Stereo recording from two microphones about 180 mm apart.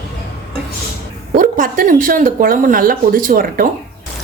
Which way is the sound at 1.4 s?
50° right (ahead or behind).